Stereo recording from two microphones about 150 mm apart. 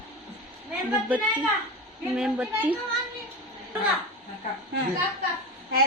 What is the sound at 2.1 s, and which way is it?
Speech, 5° right (ahead or behind).